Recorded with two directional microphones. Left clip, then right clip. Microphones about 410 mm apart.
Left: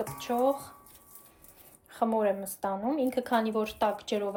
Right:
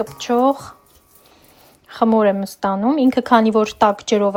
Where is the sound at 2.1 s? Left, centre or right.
Centre.